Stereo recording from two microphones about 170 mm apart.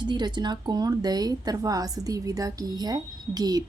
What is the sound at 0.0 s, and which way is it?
A woman's voice, 25° right (ahead or behind).